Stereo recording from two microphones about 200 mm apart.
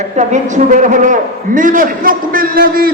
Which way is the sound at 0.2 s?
40° right (ahead or behind).